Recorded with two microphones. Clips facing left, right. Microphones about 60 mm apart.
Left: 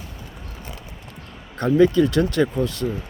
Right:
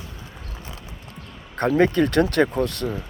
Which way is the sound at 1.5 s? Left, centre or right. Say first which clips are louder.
Left 2 dB; right.